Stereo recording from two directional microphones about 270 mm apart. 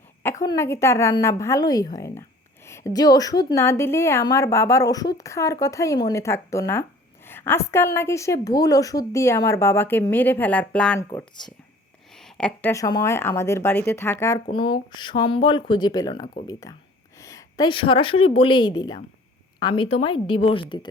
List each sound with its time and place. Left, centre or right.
0.4 s a woman's voice: centre
11.1 s a woman's voice: centre
12.1 s a woman's voice: centre